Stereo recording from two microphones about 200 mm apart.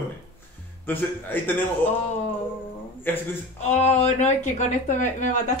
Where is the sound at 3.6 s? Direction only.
35° left (ahead or behind).